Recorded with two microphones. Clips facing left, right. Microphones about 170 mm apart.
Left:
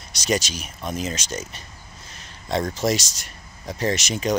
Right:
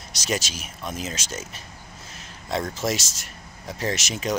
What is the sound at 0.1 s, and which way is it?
Speech, centre (ahead or behind).